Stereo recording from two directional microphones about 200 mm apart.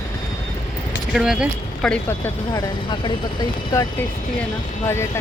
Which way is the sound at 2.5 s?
20° left (ahead or behind).